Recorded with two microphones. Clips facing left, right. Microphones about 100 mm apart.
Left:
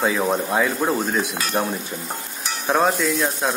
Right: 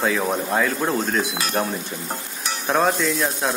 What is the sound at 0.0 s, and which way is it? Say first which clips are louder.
Speech: left 1 dB; centre (ahead or behind).